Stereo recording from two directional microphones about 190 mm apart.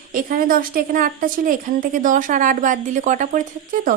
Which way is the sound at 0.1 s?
45° right (ahead or behind).